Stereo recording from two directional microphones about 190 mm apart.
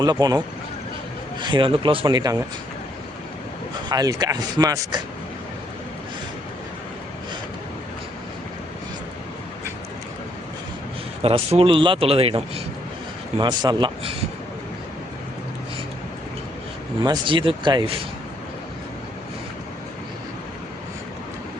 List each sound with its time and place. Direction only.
0.0 s speech: 20° right (ahead or behind)
3.8 s speech: 20° right (ahead or behind)
11.2 s a man's voice: 30° right (ahead or behind)
17.0 s speech: 25° right (ahead or behind)